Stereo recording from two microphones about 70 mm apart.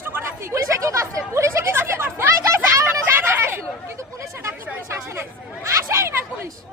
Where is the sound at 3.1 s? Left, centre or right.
Right.